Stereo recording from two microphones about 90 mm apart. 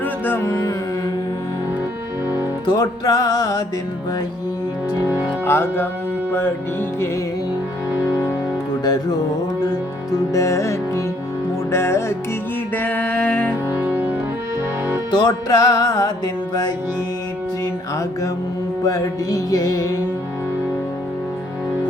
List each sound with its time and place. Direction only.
0.0 s music: 20° left (ahead or behind)
0.4 s music: 35° left (ahead or behind)
2.6 s music: 50° left (ahead or behind)
5.5 s music: 25° left (ahead or behind)
8.8 s music: 50° left (ahead or behind); by 12.1 s 30° left (ahead or behind)
12.7 s music: 20° left (ahead or behind)
13.7 s music: 15° right (ahead or behind)
15.1 s music: 50° left (ahead or behind)
18.9 s music: 40° left (ahead or behind)